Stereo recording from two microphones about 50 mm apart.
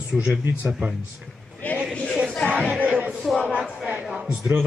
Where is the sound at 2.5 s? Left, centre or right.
Right.